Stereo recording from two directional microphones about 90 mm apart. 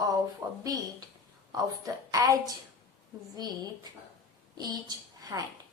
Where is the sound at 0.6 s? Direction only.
40° right (ahead or behind).